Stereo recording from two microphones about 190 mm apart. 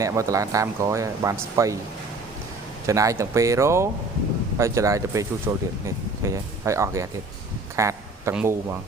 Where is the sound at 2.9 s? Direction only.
15° right (ahead or behind).